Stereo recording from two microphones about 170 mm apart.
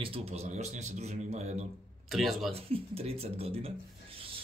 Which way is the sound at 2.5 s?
35° right (ahead or behind).